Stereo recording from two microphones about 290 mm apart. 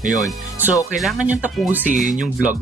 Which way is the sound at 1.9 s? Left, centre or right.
Right.